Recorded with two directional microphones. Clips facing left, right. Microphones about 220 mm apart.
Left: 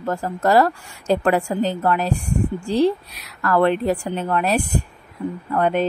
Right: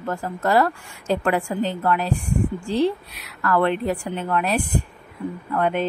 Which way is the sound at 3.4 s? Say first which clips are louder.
Left 3 dB; 35° left (ahead or behind).